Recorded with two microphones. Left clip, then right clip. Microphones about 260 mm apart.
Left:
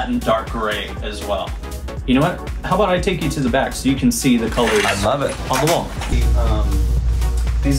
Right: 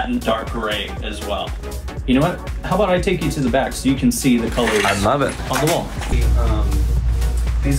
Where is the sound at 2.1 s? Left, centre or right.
Centre.